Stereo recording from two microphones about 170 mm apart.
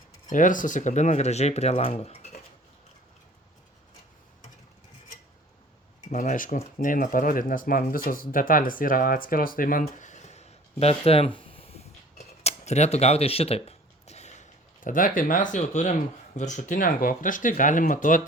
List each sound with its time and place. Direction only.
0.3 s speech: 50° left (ahead or behind)
6.1 s speech: 45° left (ahead or behind)
11.3 s a sound: 30° left (ahead or behind)
16.4 s speech: 45° left (ahead or behind)